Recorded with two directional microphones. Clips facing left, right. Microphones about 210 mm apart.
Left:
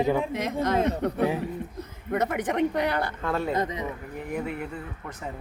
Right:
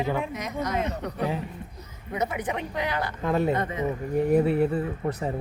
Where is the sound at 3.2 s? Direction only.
15° right (ahead or behind).